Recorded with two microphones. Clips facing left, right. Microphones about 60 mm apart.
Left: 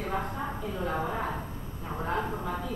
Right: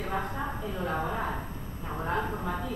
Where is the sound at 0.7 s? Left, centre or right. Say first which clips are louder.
Even; centre.